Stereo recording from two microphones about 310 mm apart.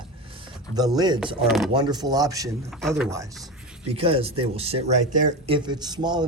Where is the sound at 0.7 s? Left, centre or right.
Centre.